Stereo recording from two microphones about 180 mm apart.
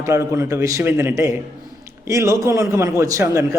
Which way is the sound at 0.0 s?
15° right (ahead or behind).